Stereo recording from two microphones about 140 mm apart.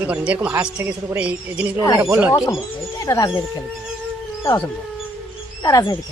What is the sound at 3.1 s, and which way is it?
Speech, 25° left (ahead or behind).